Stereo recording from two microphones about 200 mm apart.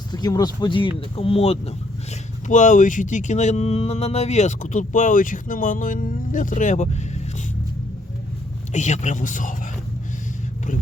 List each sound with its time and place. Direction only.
0.1 s speech: 20° left (ahead or behind); by 7.4 s 35° left (ahead or behind)
8.7 s speech: 35° left (ahead or behind)